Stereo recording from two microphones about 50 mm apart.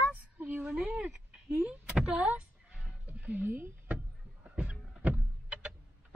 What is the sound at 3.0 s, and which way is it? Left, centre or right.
Music, right.